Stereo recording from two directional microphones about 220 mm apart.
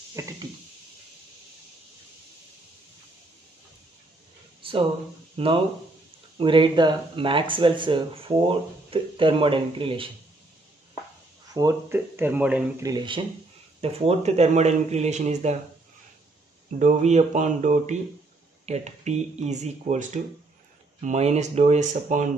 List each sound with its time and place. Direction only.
0.1 s a sound: 15° right (ahead or behind)
4.6 s a sound: 25° right (ahead or behind)
5.4 s speech: 25° right (ahead or behind)
11.5 s speech: 15° right (ahead or behind)
12.9 s speech: 20° right (ahead or behind)
16.7 s speech: 30° right (ahead or behind)